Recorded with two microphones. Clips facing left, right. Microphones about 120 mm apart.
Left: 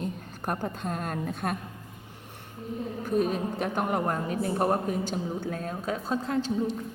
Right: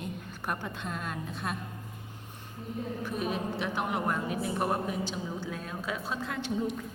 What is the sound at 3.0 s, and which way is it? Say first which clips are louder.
A woman's voice: left 8 dB; 45° left (ahead or behind).